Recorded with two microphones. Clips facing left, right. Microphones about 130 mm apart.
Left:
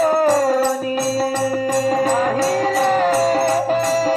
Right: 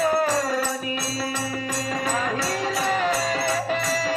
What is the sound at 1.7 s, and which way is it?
Music, 50° left (ahead or behind).